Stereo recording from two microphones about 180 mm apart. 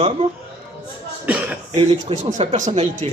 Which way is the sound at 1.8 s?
40° right (ahead or behind).